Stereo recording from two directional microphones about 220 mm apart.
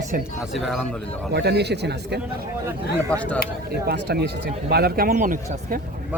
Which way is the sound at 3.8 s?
45° right (ahead or behind).